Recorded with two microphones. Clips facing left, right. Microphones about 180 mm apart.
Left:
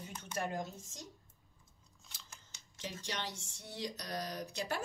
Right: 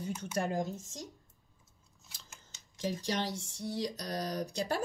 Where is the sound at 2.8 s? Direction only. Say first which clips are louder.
Right 8 dB; 40° right (ahead or behind).